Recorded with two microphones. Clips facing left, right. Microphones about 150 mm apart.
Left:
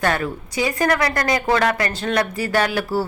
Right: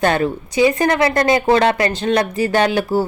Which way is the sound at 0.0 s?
25° right (ahead or behind).